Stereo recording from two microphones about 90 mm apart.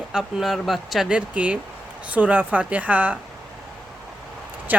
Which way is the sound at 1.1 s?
15° right (ahead or behind).